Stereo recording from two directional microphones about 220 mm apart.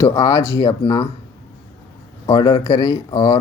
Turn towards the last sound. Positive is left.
turn(degrees=15)  # may be behind; listen again after turning